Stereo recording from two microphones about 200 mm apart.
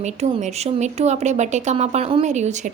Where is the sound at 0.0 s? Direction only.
35° right (ahead or behind).